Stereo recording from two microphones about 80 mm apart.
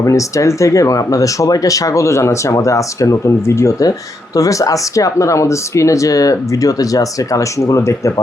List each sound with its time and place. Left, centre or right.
0.0 s speech: left